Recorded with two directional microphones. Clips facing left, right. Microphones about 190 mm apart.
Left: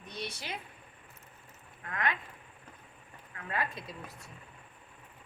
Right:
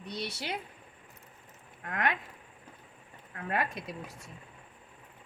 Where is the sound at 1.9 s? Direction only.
60° right (ahead or behind).